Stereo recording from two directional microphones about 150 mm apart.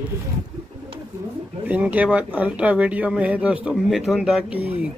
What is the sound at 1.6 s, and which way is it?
Speech, 10° right (ahead or behind).